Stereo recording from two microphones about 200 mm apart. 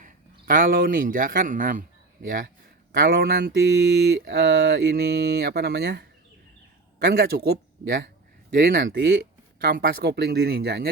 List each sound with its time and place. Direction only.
0.0 s speech: 45° right (ahead or behind)
3.9 s mantra: 60° right (ahead or behind)
7.0 s speech: 55° right (ahead or behind)
8.5 s mantra: 55° right (ahead or behind)
9.6 s speech: 50° right (ahead or behind)